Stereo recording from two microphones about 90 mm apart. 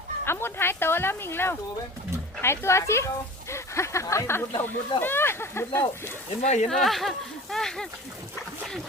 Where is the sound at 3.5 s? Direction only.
30° left (ahead or behind).